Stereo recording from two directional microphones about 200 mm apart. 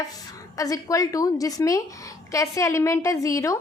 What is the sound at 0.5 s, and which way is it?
A woman's voice, 15° left (ahead or behind).